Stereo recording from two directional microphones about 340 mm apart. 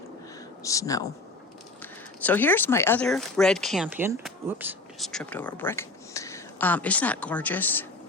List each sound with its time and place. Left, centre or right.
0.6 s speech: centre